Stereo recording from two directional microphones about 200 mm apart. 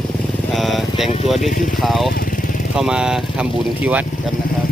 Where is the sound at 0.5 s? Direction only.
Centre (ahead or behind).